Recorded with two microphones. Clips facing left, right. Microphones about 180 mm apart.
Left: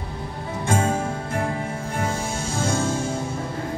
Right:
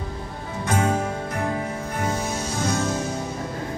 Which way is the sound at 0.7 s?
25° left (ahead or behind).